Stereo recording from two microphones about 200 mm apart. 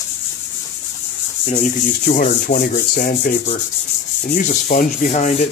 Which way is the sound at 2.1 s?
45° left (ahead or behind).